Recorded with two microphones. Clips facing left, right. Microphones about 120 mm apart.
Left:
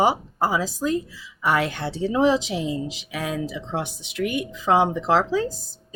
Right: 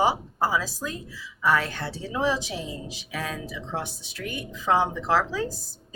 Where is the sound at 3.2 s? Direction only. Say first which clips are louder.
Left 8 dB; 15° left (ahead or behind).